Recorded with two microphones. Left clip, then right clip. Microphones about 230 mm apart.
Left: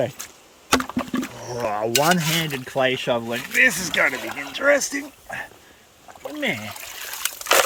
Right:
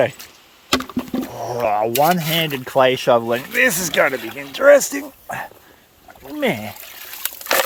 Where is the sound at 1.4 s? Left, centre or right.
Centre.